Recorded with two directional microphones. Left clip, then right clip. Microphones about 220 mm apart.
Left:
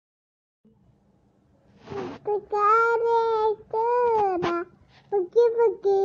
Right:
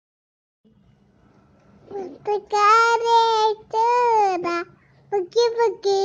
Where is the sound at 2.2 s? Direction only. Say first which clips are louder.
Right 5 dB; 5° right (ahead or behind).